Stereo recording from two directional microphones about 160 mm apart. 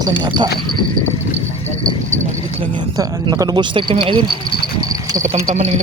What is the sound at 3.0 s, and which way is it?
Speech, 25° right (ahead or behind).